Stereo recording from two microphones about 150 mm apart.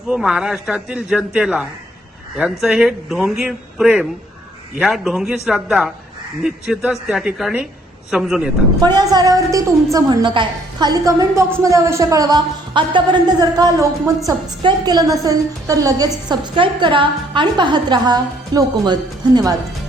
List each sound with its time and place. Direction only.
0.1 s a man's voice: 5° right (ahead or behind)
8.8 s a woman's voice: 30° right (ahead or behind)